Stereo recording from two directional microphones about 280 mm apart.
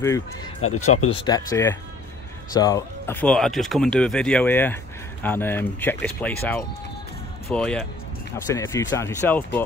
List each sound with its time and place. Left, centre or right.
0.6 s speech: left
0.9 s speech: centre